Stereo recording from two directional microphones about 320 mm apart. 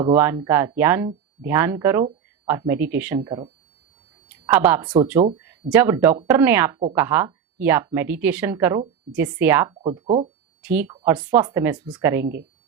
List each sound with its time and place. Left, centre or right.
0.0 s speech: centre
9.9 s speech: centre
10.6 s speech: centre
12.2 s speech: right